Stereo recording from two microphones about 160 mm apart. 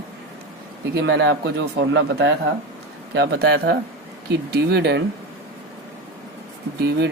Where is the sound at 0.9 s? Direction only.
90° right.